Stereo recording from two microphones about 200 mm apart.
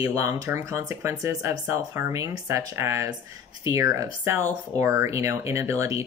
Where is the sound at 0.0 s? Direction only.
15° right (ahead or behind).